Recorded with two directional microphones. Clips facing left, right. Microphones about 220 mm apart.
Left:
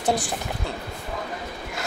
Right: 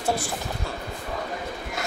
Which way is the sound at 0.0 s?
15° left (ahead or behind).